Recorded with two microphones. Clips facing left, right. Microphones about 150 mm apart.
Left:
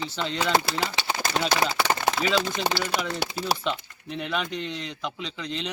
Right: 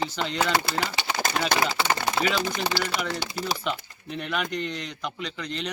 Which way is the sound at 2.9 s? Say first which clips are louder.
Left 1 dB; 65° left (ahead or behind).